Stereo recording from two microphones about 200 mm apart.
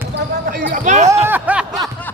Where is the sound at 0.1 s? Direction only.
50° right (ahead or behind); by 1.2 s 35° right (ahead or behind).